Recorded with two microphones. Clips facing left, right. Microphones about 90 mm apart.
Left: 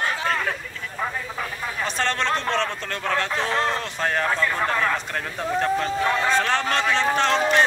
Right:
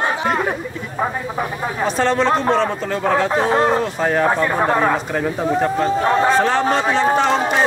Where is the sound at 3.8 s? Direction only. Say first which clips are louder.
Right 7 dB; 5° right (ahead or behind).